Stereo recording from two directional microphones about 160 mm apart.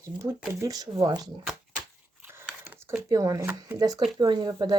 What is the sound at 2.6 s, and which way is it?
Speech, 15° right (ahead or behind).